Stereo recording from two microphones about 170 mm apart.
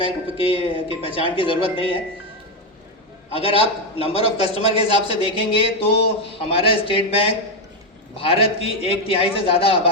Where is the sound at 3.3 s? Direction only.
35° left (ahead or behind).